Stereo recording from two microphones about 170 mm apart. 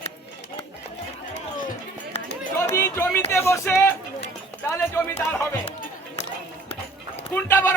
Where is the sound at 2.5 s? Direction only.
15° left (ahead or behind).